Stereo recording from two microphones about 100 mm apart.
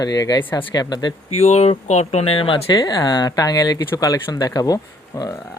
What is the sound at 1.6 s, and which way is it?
Speech, 90° left.